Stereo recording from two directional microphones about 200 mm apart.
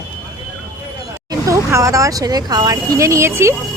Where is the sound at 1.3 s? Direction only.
15° right (ahead or behind).